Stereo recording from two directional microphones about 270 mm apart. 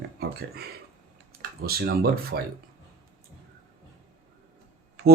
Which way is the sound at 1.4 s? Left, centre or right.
Right.